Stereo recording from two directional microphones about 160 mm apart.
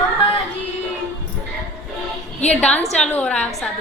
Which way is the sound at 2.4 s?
10° left (ahead or behind).